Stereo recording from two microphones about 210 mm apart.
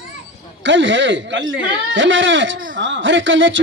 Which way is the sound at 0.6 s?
60° right (ahead or behind).